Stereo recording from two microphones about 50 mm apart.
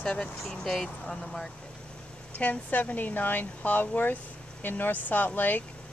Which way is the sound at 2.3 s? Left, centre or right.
Left.